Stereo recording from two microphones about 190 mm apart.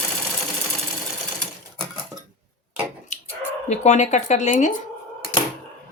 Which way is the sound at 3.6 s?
40° left (ahead or behind).